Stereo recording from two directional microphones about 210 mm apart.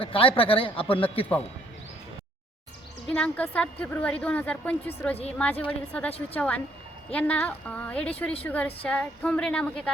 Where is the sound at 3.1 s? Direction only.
5° left (ahead or behind).